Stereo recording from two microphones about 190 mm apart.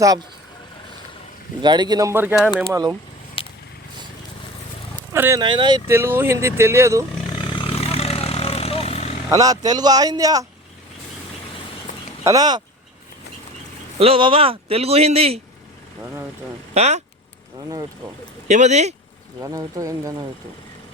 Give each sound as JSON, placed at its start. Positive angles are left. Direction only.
{"t": 0.0, "sound": "speech", "side_deg": -20}
{"t": 1.6, "sound": "speech", "side_deg": -25}
{"t": 3.4, "sound": "a sound", "side_deg": 30}
{"t": 5.1, "sound": "speech", "side_deg": -15}
{"t": 5.9, "sound": "speech", "side_deg": -10}
{"t": 7.3, "sound": "vehicle", "side_deg": 25}
{"t": 9.3, "sound": "speech", "side_deg": -20}
{"t": 11.9, "sound": "a sound", "side_deg": 40}
{"t": 12.2, "sound": "speech", "side_deg": -20}
{"t": 14.0, "sound": "speech", "side_deg": -30}
{"t": 16.7, "sound": "speech", "side_deg": -35}
{"t": 18.4, "sound": "speech", "side_deg": -35}
{"t": 19.4, "sound": "speech", "side_deg": -20}